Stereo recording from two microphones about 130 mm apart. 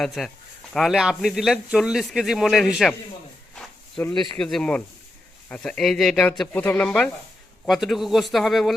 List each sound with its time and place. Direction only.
0.0 s speech: centre (ahead or behind)
3.5 s a sound: 5° left (ahead or behind)
4.1 s speech: 35° left (ahead or behind)
4.4 s speech: 5° left (ahead or behind)